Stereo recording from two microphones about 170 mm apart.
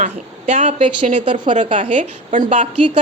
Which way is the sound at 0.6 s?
40° right (ahead or behind).